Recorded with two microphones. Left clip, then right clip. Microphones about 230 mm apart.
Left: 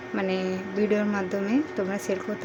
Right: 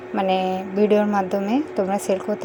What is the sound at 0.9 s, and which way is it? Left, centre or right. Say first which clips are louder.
A woman's voice: right 8 dB; centre.